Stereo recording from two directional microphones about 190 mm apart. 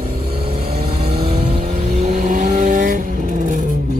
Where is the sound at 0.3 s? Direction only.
30° right (ahead or behind).